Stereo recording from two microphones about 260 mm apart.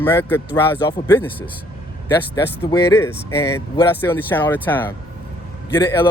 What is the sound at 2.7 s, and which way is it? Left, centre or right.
Speech, centre.